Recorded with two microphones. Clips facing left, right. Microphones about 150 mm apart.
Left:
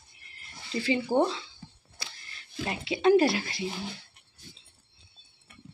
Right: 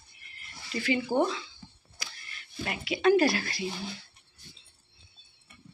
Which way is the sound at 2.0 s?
30° left (ahead or behind).